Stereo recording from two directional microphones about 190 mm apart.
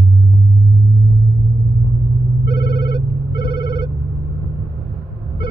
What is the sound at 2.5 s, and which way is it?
Ringtone, 55° left (ahead or behind).